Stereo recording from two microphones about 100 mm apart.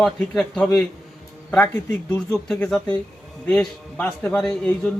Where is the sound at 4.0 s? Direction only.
15° left (ahead or behind).